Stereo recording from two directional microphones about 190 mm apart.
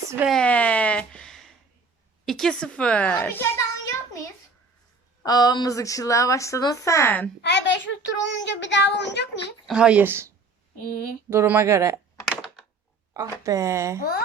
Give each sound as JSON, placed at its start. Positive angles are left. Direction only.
{"t": 0.3, "sound": "a sound", "side_deg": 5}
{"t": 2.2, "sound": "a woman's voice", "side_deg": 5}
{"t": 5.2, "sound": "speech", "side_deg": 20}
{"t": 7.4, "sound": "a child's voice", "side_deg": 70}
{"t": 9.6, "sound": "speech", "side_deg": -5}
{"t": 13.4, "sound": "speech", "side_deg": -15}
{"t": 14.0, "sound": "speech", "side_deg": 55}